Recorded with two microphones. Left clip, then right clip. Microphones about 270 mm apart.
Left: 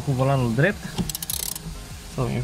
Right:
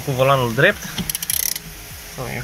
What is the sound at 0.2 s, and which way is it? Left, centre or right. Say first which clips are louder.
Speech: right 7 dB; centre.